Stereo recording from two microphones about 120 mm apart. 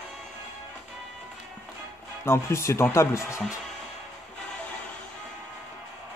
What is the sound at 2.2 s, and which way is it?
Speech, 20° left (ahead or behind).